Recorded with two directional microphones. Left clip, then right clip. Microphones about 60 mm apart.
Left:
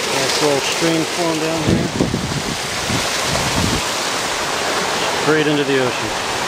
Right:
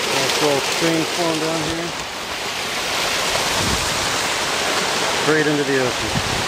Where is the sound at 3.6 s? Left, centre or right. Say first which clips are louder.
Left 1 dB; right.